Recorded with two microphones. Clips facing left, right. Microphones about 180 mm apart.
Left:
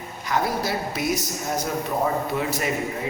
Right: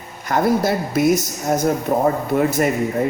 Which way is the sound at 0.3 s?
50° right (ahead or behind).